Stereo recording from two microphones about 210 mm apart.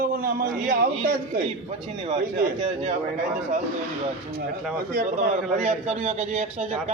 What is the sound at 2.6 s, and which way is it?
Speech, 35° right (ahead or behind).